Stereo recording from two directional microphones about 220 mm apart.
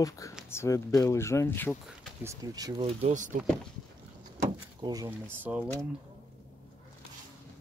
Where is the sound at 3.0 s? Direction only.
35° right (ahead or behind).